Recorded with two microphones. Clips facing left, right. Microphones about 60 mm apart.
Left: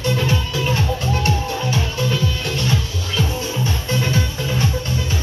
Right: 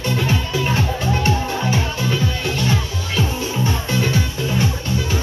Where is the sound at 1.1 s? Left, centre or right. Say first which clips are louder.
Right 1 dB; right.